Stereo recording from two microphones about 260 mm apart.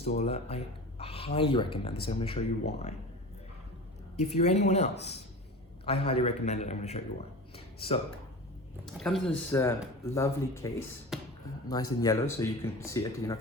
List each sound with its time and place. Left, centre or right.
0.0 s a man's voice: left
4.2 s a man's voice: left
7.5 s a sound: left
9.0 s speech: centre
11.1 s a sound: centre
11.7 s speech: centre